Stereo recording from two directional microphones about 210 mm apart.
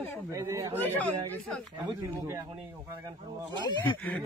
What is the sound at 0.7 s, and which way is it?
Speech, 10° left (ahead or behind).